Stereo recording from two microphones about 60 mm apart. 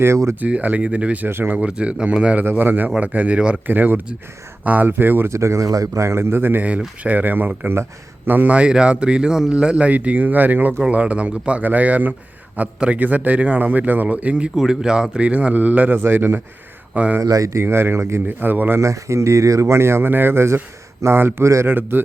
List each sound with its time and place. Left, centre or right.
0.0 s speech: right
0.3 s speech: right
2.4 s speech: right
3.7 s speech: right
5.3 s a man's voice: right
8.5 s speech: centre
14.5 s speech: centre; by 17.2 s right
17.2 s speech: right
17.5 s speech: right
18.3 s speech: right
18.8 s speech: right
21.4 s speech: right
21.7 s speech: right